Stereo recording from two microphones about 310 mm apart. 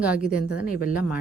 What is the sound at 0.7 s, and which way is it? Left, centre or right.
Speech, left.